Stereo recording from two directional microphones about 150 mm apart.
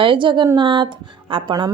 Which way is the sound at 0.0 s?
35° right (ahead or behind).